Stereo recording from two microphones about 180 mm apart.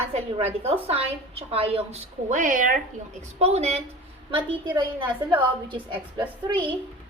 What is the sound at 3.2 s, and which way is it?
A woman's voice, 35° right (ahead or behind).